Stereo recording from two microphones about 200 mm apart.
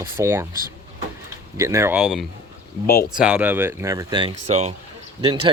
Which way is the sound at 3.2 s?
5° right (ahead or behind).